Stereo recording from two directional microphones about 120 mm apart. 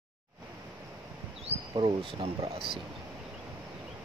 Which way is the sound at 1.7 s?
50° right (ahead or behind).